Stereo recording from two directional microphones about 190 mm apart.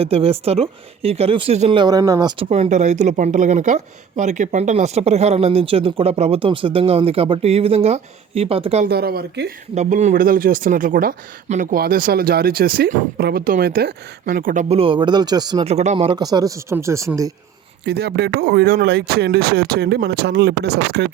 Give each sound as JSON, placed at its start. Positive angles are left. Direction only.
{"t": 0.0, "sound": "speech", "side_deg": -30}
{"t": 2.5, "sound": "speech", "side_deg": -35}
{"t": 8.8, "sound": "speech", "side_deg": -55}
{"t": 9.7, "sound": "speech", "side_deg": -40}
{"t": 15.6, "sound": "speech", "side_deg": -35}
{"t": 17.8, "sound": "speech", "side_deg": -60}